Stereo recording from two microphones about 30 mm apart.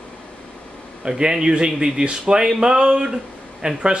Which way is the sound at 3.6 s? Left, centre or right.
Right.